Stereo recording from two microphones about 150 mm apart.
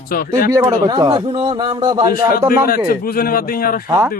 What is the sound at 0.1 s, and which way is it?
Speech, 80° left.